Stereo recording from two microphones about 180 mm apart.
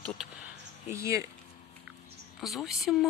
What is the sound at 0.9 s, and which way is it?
Speech, 15° right (ahead or behind).